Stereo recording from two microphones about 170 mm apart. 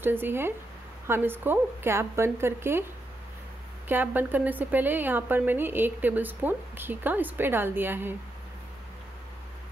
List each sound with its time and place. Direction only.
0.0 s a woman's voice: 10° right (ahead or behind)
3.9 s a woman's voice: 10° right (ahead or behind)